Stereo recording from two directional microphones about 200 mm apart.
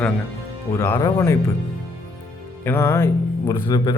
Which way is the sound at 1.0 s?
15° left (ahead or behind).